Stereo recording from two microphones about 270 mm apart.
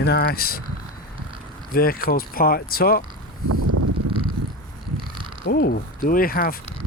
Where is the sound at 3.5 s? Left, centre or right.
Right.